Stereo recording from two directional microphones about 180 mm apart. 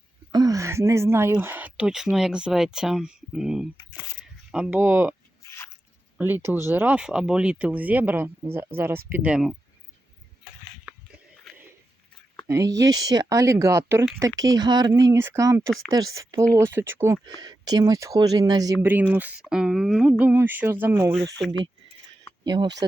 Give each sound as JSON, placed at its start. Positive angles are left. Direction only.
{"t": 0.3, "sound": "speech", "side_deg": -20}
{"t": 5.5, "sound": "a sound", "side_deg": 15}
{"t": 6.1, "sound": "speech", "side_deg": -10}
{"t": 10.8, "sound": "a sound", "side_deg": -5}
{"t": 12.5, "sound": "speech", "side_deg": -20}
{"t": 22.4, "sound": "speech", "side_deg": -25}